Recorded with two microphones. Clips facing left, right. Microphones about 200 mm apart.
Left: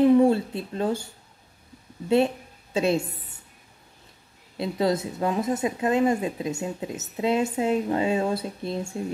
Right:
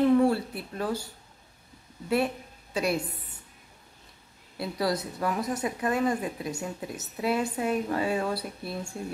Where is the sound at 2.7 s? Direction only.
25° left (ahead or behind).